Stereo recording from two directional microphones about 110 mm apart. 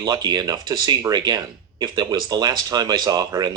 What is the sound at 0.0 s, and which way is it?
Speech, 40° right (ahead or behind).